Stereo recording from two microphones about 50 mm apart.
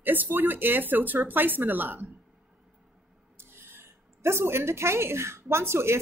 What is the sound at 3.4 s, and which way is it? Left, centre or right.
Speech, right.